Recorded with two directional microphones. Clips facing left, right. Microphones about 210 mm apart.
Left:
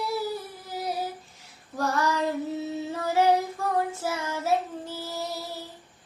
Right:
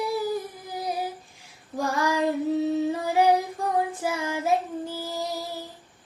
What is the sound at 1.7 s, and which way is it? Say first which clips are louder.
Child singing: right 1 dB; 15° right (ahead or behind).